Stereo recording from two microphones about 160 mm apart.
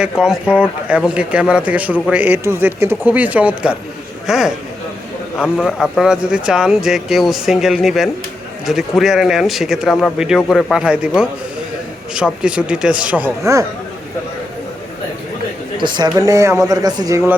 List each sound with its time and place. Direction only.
0.0 s speech: 5° right (ahead or behind)
15.8 s speech: 25° right (ahead or behind)